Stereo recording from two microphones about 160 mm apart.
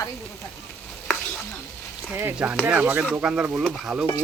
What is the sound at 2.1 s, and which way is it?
Speech, 10° right (ahead or behind).